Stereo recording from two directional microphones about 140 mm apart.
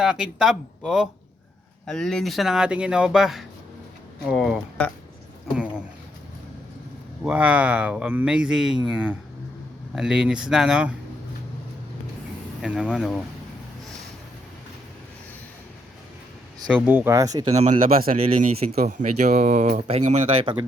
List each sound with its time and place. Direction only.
0.0 s speech: 5° right (ahead or behind)
7.3 s speech: 10° right (ahead or behind)
12.6 s speech: 5° right (ahead or behind)
16.6 s speech: 10° right (ahead or behind)
17.2 s speech: 25° right (ahead or behind)
17.5 s speech: 50° right (ahead or behind)
18.0 s speech: 80° right
18.9 s speech: 60° right (ahead or behind)
20.4 s speech: 35° right (ahead or behind)